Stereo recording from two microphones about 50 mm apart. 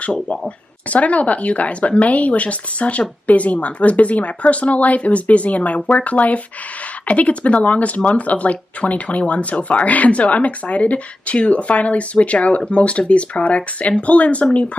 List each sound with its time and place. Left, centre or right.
0.0 s speech: left